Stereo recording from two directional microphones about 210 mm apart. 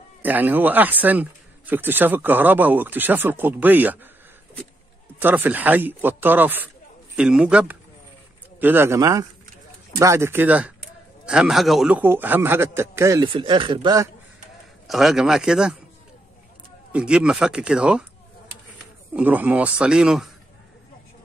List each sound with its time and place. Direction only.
0.2 s speech: 10° right (ahead or behind)
5.2 s speech: 10° right (ahead or behind)
14.9 s speech: centre (ahead or behind)
16.9 s speech: 5° right (ahead or behind)
19.1 s speech: 10° right (ahead or behind)